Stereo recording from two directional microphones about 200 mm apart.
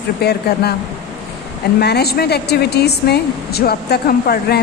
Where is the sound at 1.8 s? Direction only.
55° left (ahead or behind).